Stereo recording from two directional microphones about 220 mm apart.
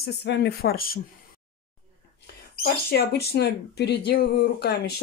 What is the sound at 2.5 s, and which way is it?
Speech, 45° left (ahead or behind).